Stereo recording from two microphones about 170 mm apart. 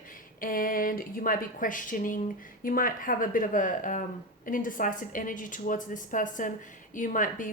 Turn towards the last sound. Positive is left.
turn(degrees=50)  # may be behind; listen again after turning